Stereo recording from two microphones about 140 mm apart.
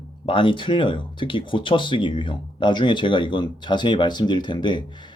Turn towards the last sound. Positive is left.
turn(degrees=35)  # may be behind; listen again after turning